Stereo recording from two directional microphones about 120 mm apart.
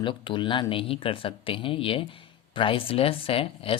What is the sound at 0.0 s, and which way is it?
Speech, 45° left (ahead or behind).